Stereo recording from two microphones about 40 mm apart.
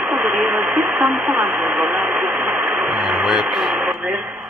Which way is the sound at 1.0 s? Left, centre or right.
Right.